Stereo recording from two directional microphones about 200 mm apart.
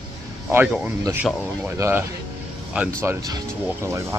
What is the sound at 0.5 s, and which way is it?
Speech, 5° right (ahead or behind).